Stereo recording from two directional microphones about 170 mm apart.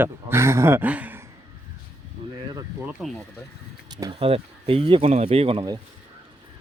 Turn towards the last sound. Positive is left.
turn(degrees=-35)  # may be behind; listen again after turning